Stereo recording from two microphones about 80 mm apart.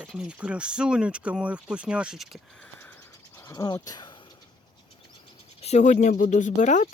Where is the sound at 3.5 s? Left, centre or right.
Left.